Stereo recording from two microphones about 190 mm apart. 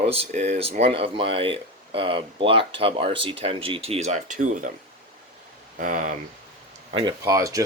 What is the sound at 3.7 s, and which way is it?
Cutlery, 30° right (ahead or behind).